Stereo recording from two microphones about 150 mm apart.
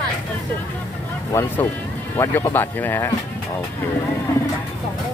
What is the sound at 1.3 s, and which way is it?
Speech, 15° left (ahead or behind).